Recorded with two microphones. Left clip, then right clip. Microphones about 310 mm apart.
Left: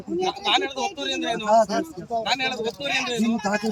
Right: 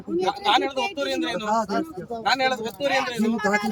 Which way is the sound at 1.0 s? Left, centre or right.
Centre.